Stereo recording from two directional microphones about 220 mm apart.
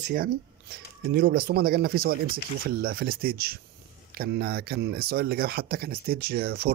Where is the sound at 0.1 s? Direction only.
45° right (ahead or behind).